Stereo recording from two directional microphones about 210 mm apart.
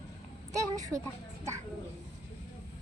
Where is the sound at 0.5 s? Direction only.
15° right (ahead or behind).